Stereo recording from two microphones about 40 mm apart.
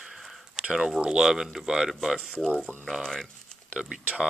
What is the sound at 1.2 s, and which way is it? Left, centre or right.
Speech, centre.